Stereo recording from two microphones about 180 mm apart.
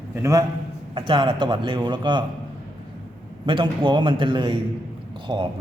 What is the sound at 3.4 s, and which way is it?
Speech, 30° right (ahead or behind).